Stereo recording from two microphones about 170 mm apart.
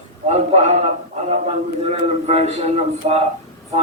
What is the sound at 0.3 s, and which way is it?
A man's voice, 40° right (ahead or behind).